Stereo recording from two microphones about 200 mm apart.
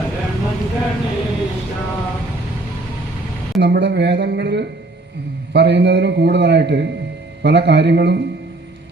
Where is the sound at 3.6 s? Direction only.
60° right (ahead or behind).